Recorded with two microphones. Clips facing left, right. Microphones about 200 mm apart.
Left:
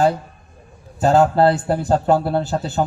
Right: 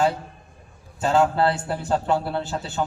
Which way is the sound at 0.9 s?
40° left (ahead or behind).